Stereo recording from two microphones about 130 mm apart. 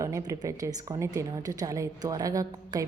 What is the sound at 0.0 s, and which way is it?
A woman's voice, 25° right (ahead or behind).